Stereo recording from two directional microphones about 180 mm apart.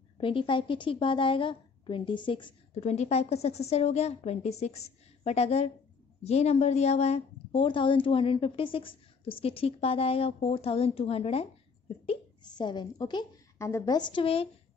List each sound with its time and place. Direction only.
0.2 s a woman's voice: 30° left (ahead or behind)